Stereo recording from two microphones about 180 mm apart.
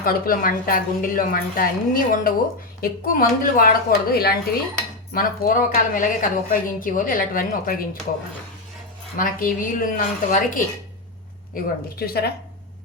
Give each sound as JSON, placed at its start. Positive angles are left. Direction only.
{"t": 0.0, "sound": "a woman's voice", "side_deg": 55}
{"t": 9.1, "sound": "a woman's voice", "side_deg": 50}